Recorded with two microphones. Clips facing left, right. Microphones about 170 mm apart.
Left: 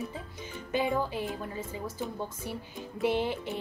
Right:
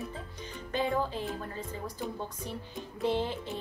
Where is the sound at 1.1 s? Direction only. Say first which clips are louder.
Left 2 dB; 15° left (ahead or behind).